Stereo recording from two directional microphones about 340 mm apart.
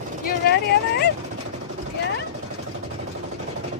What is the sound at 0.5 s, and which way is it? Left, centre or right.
Speech, left.